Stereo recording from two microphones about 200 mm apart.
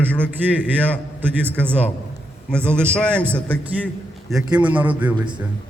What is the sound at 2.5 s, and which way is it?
Speech, 5° left (ahead or behind).